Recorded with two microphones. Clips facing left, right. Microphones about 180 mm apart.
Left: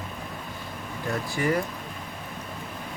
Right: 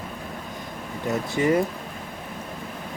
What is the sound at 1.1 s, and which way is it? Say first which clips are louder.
Speech: right 4 dB; 20° right (ahead or behind).